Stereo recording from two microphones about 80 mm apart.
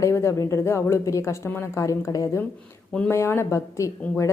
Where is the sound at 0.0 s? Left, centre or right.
Left.